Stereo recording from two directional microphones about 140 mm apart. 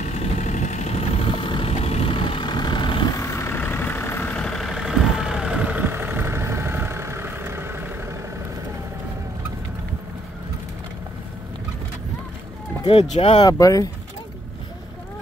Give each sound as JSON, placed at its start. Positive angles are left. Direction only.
{"t": 0.0, "sound": "vehicle", "side_deg": 50}
{"t": 3.2, "sound": "vehicle", "side_deg": 15}
{"t": 13.1, "sound": "speech", "side_deg": 50}
{"t": 13.4, "sound": "speech", "side_deg": 25}